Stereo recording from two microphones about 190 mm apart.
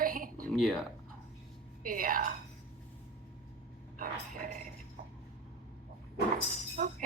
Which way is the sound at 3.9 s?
45° right (ahead or behind).